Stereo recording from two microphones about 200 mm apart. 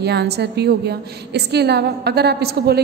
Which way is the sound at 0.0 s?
55° right (ahead or behind).